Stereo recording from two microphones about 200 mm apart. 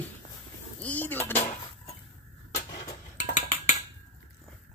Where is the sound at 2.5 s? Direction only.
35° left (ahead or behind).